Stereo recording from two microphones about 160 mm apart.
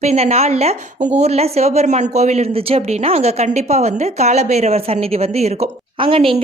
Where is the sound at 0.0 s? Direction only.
40° right (ahead or behind).